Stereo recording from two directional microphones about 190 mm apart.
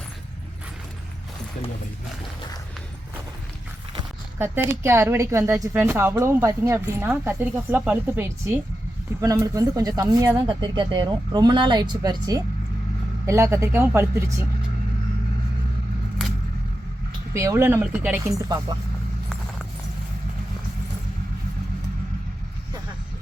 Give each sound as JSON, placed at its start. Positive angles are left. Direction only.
{"t": 4.4, "sound": "speech", "side_deg": -10}
{"t": 17.3, "sound": "speech", "side_deg": -15}